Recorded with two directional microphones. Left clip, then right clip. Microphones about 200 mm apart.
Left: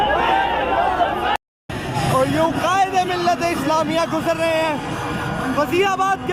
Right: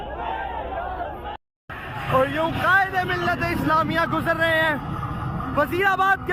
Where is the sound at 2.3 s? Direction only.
10° left (ahead or behind).